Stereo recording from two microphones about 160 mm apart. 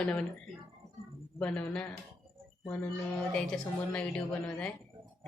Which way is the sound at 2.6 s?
15° left (ahead or behind).